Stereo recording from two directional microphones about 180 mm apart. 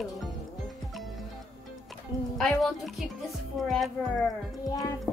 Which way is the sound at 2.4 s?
Centre (ahead or behind).